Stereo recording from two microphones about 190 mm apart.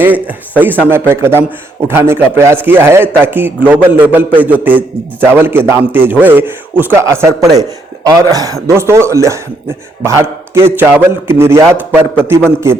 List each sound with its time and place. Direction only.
0.0 s a man's voice: 10° right (ahead or behind)